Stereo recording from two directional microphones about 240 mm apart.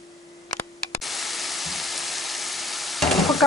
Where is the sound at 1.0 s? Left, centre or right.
Centre.